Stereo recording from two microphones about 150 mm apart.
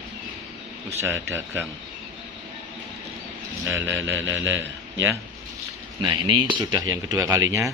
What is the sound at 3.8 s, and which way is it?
A man's voice, 15° right (ahead or behind).